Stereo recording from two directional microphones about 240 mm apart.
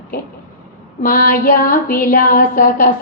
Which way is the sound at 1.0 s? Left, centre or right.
Left.